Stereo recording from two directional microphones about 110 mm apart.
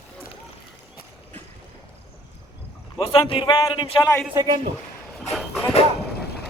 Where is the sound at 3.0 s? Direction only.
55° left (ahead or behind); by 3.8 s 40° left (ahead or behind).